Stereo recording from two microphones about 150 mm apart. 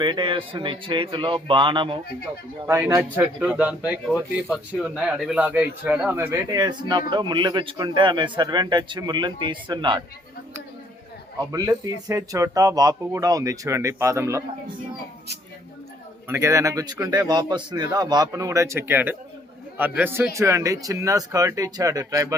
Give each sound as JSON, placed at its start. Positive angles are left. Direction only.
{"t": 0.0, "sound": "speech", "side_deg": -30}
{"t": 2.6, "sound": "a man's voice", "side_deg": -15}
{"t": 11.5, "sound": "speech", "side_deg": -25}
{"t": 16.3, "sound": "speech", "side_deg": -20}